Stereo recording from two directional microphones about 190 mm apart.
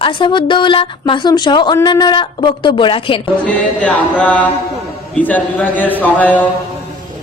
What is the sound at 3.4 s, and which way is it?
Speech, 5° left (ahead or behind).